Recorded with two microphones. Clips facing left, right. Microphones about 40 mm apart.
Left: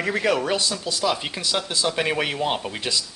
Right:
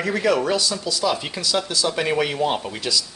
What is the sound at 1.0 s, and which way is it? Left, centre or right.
Speech, centre.